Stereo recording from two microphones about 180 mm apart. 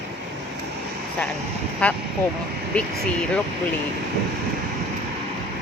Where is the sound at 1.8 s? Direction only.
5° left (ahead or behind).